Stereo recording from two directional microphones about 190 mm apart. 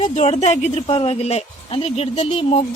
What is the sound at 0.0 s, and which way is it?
A woman's voice, 35° left (ahead or behind).